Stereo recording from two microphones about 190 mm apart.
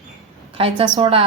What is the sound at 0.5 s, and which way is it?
Speech, 25° right (ahead or behind).